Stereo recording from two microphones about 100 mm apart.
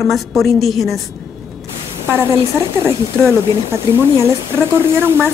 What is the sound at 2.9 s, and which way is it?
Speech, 25° right (ahead or behind).